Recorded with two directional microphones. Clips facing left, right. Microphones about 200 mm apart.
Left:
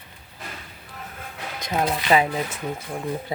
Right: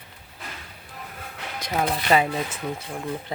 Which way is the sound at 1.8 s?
10° left (ahead or behind).